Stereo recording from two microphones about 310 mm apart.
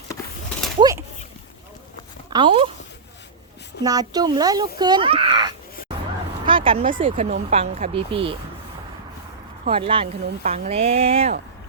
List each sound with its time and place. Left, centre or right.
0.8 s a sound: centre
2.3 s speech: centre
3.8 s speech: centre
9.6 s speech: centre